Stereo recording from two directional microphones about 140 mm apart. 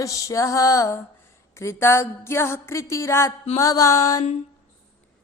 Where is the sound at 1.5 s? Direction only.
20° left (ahead or behind).